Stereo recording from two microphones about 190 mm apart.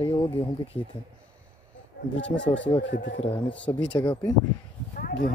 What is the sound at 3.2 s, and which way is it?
Speech, 30° left (ahead or behind).